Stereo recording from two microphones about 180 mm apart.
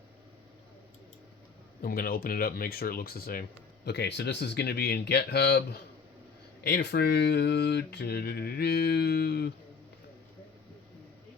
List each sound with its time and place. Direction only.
1.8 s speech: 55° left (ahead or behind)
3.8 s speech: 65° left (ahead or behind)